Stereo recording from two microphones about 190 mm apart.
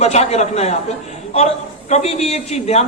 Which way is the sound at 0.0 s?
35° left (ahead or behind).